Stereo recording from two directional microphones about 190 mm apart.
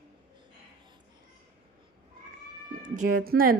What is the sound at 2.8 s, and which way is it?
Speech, 45° right (ahead or behind).